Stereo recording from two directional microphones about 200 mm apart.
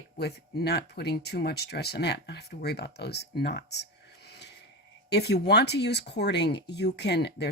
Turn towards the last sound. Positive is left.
turn(degrees=55)  # may be behind; listen again after turning